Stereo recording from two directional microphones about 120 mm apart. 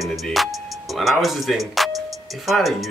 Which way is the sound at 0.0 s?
Centre (ahead or behind).